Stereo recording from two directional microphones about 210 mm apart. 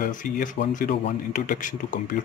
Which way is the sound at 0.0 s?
40° left (ahead or behind).